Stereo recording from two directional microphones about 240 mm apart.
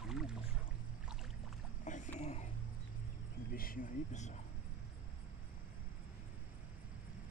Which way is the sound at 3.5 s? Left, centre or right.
Left.